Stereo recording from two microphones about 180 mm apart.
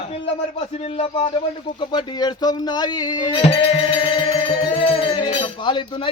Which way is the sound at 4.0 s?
30° left (ahead or behind).